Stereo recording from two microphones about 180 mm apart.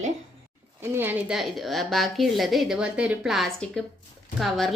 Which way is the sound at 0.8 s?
10° right (ahead or behind).